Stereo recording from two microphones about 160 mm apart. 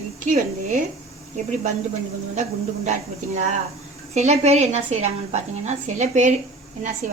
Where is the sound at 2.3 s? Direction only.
45° right (ahead or behind).